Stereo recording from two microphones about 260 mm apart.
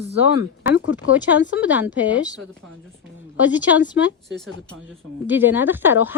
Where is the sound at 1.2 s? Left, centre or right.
Left.